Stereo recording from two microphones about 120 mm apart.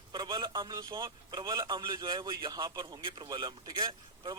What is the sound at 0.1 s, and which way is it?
Speech, 40° right (ahead or behind).